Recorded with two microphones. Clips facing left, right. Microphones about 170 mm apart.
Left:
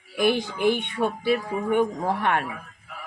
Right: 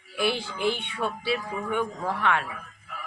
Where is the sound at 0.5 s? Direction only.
50° left (ahead or behind).